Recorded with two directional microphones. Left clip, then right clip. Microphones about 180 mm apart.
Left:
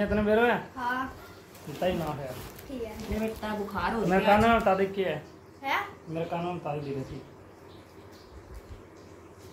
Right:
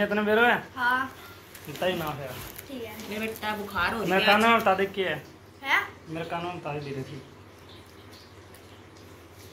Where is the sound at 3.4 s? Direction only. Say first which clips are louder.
Right 3 dB; 35° left (ahead or behind).